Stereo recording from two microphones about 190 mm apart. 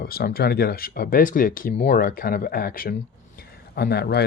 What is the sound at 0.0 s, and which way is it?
Speech, 55° left (ahead or behind).